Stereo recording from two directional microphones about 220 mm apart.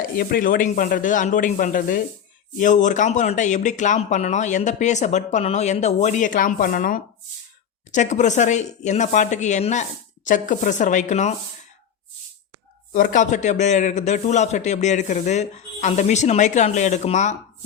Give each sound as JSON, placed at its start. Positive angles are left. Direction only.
{"t": 0.2, "sound": "speech", "side_deg": 40}
{"t": 12.9, "sound": "speech", "side_deg": 35}